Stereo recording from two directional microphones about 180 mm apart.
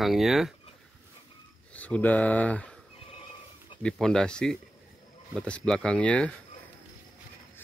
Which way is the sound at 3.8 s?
5° left (ahead or behind).